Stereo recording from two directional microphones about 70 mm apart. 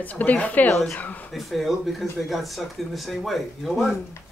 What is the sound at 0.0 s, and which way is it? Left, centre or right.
Speech, left.